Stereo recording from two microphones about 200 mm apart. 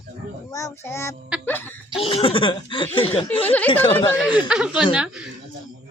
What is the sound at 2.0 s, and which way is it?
Speech, 30° left (ahead or behind).